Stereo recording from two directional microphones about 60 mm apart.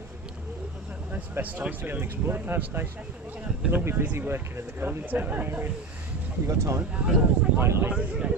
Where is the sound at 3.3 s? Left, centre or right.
Centre.